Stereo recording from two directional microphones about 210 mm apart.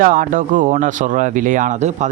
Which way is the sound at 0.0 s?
40° right (ahead or behind).